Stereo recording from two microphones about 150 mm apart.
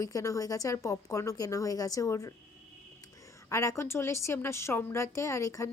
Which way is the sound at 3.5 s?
20° left (ahead or behind).